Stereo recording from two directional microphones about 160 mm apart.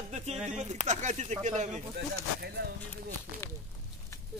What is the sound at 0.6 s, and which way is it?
Speech, 45° right (ahead or behind).